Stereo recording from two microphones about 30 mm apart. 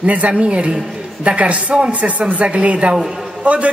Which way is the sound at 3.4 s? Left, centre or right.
Right.